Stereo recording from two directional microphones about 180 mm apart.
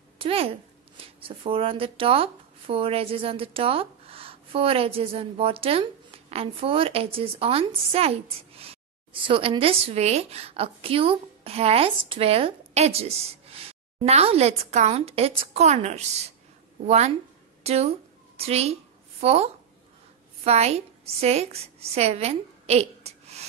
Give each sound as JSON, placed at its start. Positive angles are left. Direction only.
{"t": 0.2, "sound": "a child's voice", "side_deg": -30}
{"t": 17.6, "sound": "a sound", "side_deg": -35}
{"t": 20.4, "sound": "a woman's voice", "side_deg": -35}